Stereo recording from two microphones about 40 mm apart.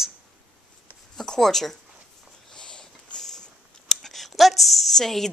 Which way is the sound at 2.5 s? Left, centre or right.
Centre.